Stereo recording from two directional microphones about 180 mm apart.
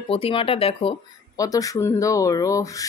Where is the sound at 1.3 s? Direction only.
20° left (ahead or behind).